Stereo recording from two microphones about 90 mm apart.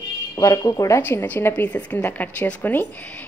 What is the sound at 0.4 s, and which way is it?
Speech, 40° left (ahead or behind).